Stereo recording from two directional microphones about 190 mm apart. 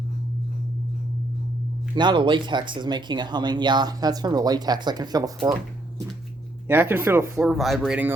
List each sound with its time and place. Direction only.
2.0 s speech: 25° right (ahead or behind)
6.7 s speech: 10° right (ahead or behind)